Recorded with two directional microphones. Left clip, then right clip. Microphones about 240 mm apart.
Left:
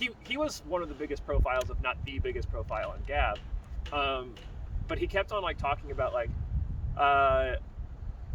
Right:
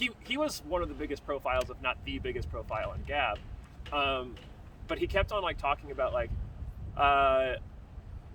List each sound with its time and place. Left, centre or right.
0.0 s speech: centre